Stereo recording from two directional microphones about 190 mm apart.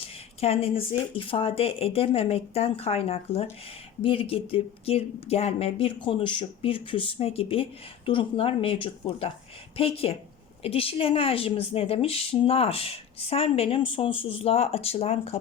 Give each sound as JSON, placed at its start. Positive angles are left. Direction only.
{"t": 0.0, "sound": "a woman's voice", "side_deg": 30}